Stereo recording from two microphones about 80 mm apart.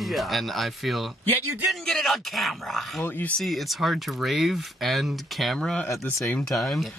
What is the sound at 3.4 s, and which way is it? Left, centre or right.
Speech, centre.